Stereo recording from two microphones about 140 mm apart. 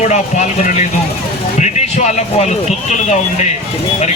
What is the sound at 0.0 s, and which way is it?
Speech, 55° left (ahead or behind).